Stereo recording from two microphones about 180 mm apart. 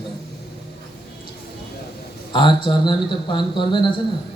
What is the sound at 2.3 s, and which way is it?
A man's voice, 25° left (ahead or behind).